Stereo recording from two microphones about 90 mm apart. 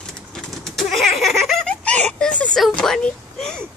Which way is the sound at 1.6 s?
10° left (ahead or behind).